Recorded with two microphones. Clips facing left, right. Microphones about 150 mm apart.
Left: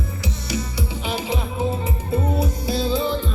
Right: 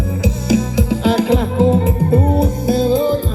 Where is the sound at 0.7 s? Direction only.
90° right.